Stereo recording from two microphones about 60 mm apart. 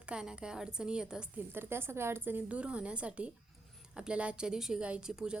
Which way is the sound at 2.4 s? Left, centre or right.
Right.